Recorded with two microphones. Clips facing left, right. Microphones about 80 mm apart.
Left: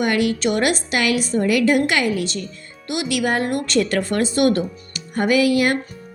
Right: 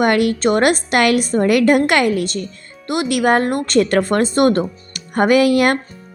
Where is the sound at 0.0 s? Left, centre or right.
Right.